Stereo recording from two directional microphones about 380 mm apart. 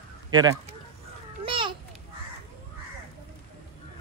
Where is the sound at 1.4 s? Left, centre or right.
Centre.